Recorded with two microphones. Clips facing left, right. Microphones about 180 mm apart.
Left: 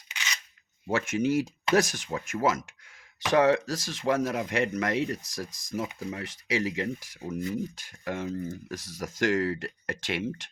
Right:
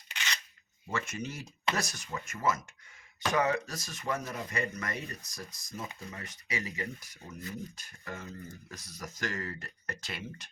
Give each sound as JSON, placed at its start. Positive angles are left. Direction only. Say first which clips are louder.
{"t": 0.9, "sound": "speech", "louder": "left 11 dB", "side_deg": 90}